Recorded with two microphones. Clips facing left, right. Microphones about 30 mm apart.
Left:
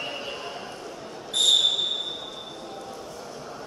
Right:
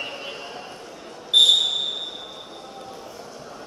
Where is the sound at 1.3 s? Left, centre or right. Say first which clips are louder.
Right 9 dB; right.